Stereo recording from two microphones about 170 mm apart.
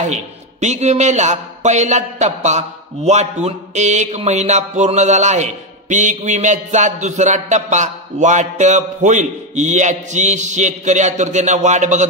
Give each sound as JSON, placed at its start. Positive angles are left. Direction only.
{"t": 0.0, "sound": "a man's voice", "side_deg": -45}